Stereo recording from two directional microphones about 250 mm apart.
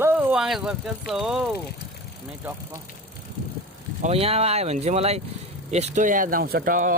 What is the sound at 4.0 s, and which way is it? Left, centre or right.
Speech, right.